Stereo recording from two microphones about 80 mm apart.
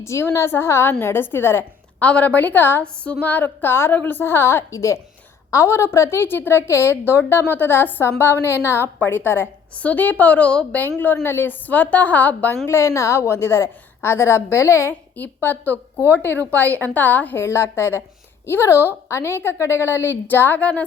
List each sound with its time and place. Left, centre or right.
0.0 s a woman's voice: left
2.0 s a woman's voice: centre
12.6 s a woman's voice: left
15.1 s a woman's voice: left
17.4 s a woman's voice: left; by 20.8 s centre